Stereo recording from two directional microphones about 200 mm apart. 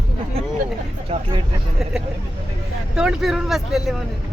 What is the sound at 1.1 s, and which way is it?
Speech, 30° right (ahead or behind).